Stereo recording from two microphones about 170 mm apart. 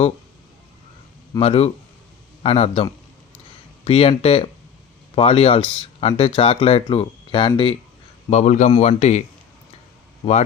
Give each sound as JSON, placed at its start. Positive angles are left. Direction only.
{"t": 1.4, "sound": "speech", "side_deg": 35}
{"t": 3.8, "sound": "speech", "side_deg": 35}
{"t": 8.3, "sound": "a man's voice", "side_deg": 45}